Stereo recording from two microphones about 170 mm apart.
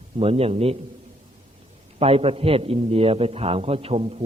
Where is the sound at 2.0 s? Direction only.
35° right (ahead or behind).